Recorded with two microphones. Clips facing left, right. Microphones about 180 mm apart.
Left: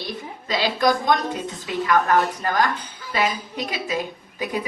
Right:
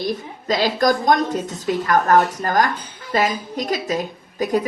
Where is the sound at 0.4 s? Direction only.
45° right (ahead or behind).